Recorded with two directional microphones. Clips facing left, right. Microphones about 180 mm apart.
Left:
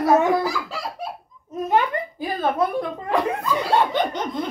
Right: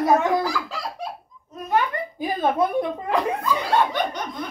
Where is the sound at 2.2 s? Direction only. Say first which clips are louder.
Right 1 dB; 20° right (ahead or behind).